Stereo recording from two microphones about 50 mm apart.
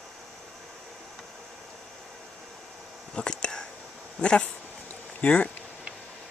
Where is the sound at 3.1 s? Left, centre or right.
Centre.